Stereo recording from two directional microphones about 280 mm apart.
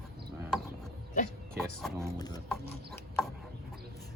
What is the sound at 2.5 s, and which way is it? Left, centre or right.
Rub, centre.